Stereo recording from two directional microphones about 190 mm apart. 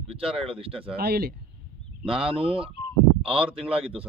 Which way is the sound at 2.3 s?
30° right (ahead or behind).